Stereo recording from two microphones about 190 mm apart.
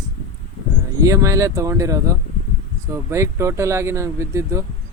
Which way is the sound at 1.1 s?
15° right (ahead or behind).